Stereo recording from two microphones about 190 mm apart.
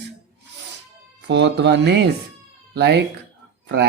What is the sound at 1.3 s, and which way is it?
Speech, 65° right (ahead or behind).